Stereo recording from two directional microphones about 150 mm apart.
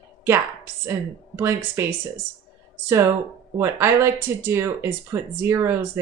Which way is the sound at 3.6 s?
15° right (ahead or behind).